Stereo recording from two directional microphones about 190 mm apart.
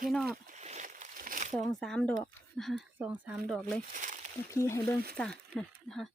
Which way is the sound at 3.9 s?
40° right (ahead or behind).